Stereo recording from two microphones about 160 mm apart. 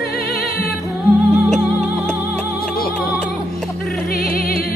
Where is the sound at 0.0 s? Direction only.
75° left (ahead or behind).